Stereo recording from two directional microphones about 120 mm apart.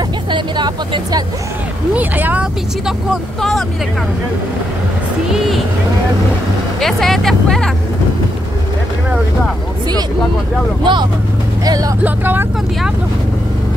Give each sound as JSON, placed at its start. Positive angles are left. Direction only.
{"t": 0.3, "sound": "speech", "side_deg": -40}
{"t": 2.0, "sound": "speech", "side_deg": -15}
{"t": 3.1, "sound": "speech", "side_deg": 0}
{"t": 6.8, "sound": "speech", "side_deg": 0}
{"t": 10.8, "sound": "speech", "side_deg": -40}
{"t": 12.0, "sound": "speech", "side_deg": -15}